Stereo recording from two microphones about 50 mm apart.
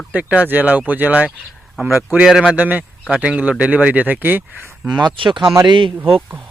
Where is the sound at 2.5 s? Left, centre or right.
Right.